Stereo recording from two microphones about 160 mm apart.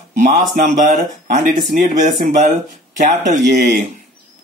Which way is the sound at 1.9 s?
50° right (ahead or behind).